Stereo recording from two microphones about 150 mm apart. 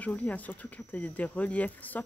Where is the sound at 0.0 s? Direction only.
10° left (ahead or behind).